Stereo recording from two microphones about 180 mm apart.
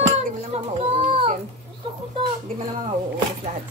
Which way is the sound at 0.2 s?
40° right (ahead or behind).